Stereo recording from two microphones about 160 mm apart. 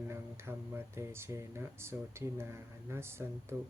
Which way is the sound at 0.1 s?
15° right (ahead or behind).